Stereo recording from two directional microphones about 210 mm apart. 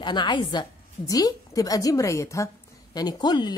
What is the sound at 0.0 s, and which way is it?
A woman's voice, 20° left (ahead or behind).